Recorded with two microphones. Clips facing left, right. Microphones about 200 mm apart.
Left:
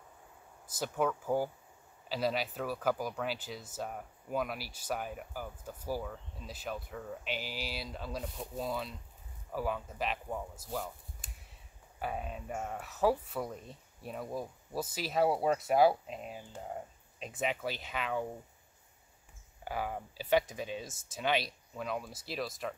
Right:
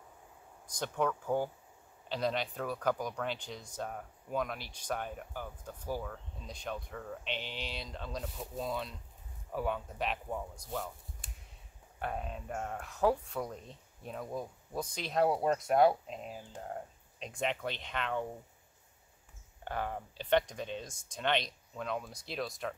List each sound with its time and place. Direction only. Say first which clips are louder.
0.7 s speech: left 1 dB; 5° left (ahead or behind)
12.0 s speech: even; 5° left (ahead or behind)
19.6 s speech: even; 5° left (ahead or behind)